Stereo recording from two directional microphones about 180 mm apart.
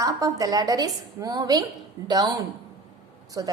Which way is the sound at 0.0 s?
20° right (ahead or behind).